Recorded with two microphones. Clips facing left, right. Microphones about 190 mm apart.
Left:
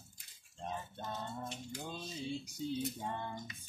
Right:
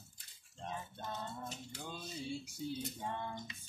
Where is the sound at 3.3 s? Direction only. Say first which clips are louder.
Left 1 dB; 25° right (ahead or behind).